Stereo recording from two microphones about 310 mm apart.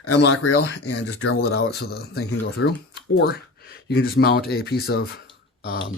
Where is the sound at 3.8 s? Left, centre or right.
Left.